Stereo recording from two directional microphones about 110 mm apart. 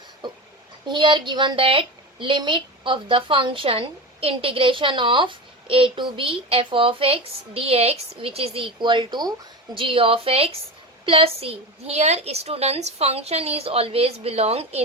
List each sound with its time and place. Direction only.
0.9 s a woman's voice: 45° right (ahead or behind)
9.7 s a woman's voice: 55° right (ahead or behind)